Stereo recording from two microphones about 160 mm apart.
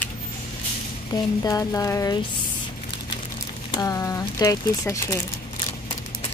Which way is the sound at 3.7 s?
20° left (ahead or behind).